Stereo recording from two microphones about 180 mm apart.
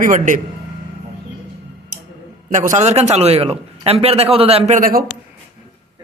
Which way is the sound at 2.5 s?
45° right (ahead or behind).